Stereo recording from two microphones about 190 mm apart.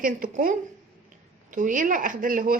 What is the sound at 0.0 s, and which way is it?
Speech, 45° right (ahead or behind).